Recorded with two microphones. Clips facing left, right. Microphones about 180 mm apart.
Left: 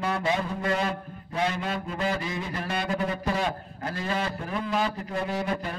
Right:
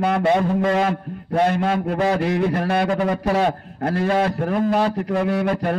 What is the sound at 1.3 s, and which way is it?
A man's voice, 55° right (ahead or behind).